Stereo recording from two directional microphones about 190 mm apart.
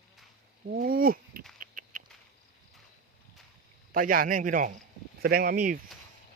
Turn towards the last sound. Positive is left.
turn(degrees=-50)  # may be behind; listen again after turning